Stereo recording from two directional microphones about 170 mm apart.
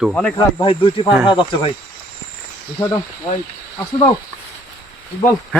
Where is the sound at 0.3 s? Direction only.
30° left (ahead or behind).